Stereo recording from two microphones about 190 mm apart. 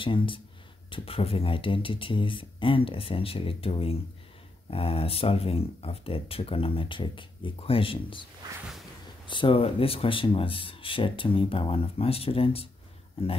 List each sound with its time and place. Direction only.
0.0 s speech: 25° left (ahead or behind)
9.3 s speech: 25° left (ahead or behind)